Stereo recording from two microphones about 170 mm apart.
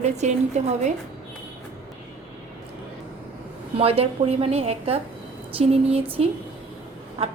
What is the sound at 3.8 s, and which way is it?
A woman's voice, 35° right (ahead or behind).